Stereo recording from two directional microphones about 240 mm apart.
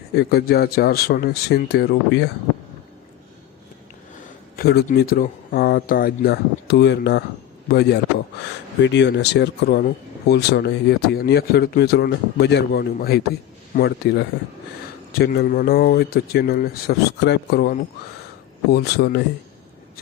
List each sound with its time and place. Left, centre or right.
0.2 s speech: left
4.5 s speech: left